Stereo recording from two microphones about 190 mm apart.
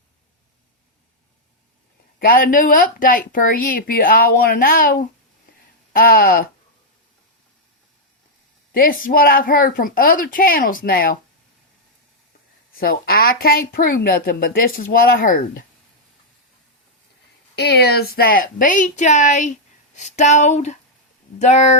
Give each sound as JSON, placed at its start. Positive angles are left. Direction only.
{"t": 2.1, "sound": "a woman's voice", "side_deg": 50}
{"t": 8.7, "sound": "a woman's voice", "side_deg": 50}
{"t": 12.7, "sound": "a woman's voice", "side_deg": 50}
{"t": 17.5, "sound": "a woman's voice", "side_deg": 60}